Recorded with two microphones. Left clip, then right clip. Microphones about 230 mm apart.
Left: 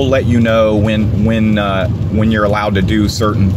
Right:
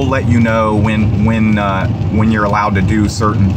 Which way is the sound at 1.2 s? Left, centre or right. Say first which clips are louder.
Even; right.